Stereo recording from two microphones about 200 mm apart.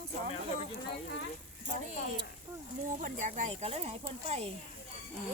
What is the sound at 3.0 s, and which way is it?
Speech, 40° right (ahead or behind).